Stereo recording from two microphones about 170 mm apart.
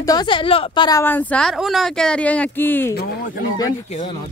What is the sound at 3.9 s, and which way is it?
Speech, 35° left (ahead or behind).